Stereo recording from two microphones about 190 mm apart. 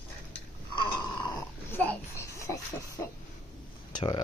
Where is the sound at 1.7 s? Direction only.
10° left (ahead or behind).